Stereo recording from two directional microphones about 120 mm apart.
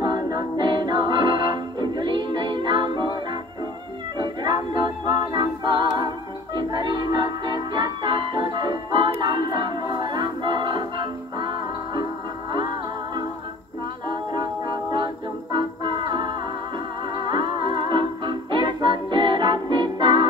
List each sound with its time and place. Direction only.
0.0 s music: 40° right (ahead or behind)
4.2 s music: 35° right (ahead or behind)
5.0 s a capella: 40° right (ahead or behind)
6.5 s music: 40° right (ahead or behind)
15.5 s music: 40° right (ahead or behind)